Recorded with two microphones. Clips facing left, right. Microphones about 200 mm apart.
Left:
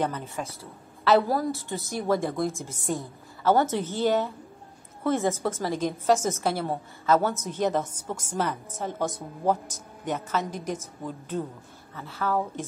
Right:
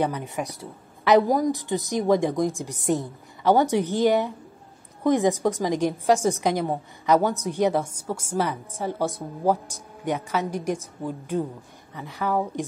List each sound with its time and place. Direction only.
0.0 s a woman's voice: 15° right (ahead or behind)